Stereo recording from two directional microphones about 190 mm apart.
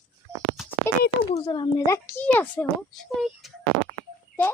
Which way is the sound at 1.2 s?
25° left (ahead or behind).